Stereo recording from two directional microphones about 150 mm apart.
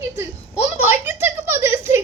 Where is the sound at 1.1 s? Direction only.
15° right (ahead or behind).